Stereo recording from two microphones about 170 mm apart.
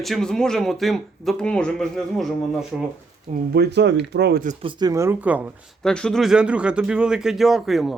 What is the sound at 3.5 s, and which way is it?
Speech, 80° right.